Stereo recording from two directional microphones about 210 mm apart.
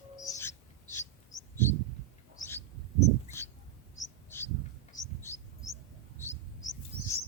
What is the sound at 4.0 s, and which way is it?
Bird, 15° left (ahead or behind).